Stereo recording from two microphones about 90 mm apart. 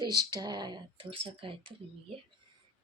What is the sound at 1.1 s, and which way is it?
Speech, 90° right.